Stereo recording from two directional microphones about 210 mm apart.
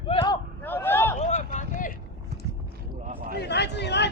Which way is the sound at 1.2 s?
35° left (ahead or behind).